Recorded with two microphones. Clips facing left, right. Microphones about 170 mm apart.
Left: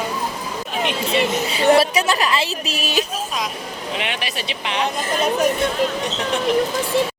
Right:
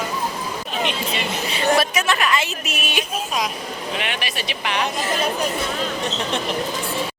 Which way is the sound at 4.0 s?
25° left (ahead or behind).